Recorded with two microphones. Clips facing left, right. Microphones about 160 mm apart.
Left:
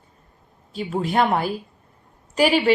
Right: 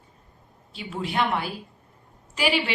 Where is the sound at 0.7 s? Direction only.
45° left (ahead or behind).